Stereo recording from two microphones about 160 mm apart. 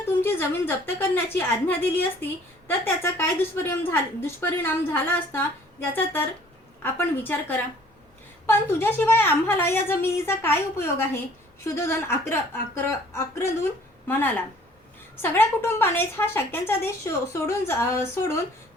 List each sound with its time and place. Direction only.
0.0 s a woman's voice: 15° left (ahead or behind)